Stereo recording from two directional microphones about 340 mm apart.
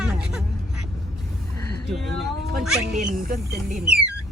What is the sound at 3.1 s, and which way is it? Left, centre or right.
Speech, right.